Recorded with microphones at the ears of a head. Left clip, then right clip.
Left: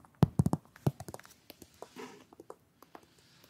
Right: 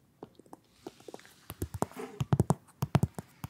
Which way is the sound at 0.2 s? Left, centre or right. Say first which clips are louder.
Left 17 dB; left.